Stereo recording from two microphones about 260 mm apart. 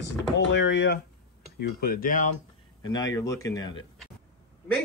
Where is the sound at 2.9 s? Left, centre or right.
Centre.